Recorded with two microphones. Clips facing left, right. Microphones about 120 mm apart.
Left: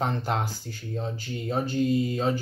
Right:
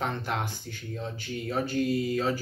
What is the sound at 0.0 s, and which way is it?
Speech, 30° left (ahead or behind).